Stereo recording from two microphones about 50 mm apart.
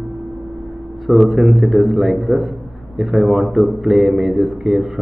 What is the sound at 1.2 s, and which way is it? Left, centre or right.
Speech, centre.